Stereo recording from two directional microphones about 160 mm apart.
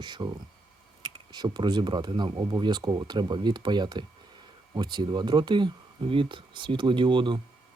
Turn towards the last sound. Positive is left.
turn(degrees=-30)  # may be behind; listen again after turning